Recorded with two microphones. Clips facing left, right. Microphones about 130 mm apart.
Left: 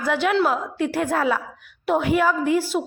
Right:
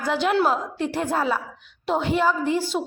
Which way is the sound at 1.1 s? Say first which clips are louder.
Left 1 dB; 20° right (ahead or behind).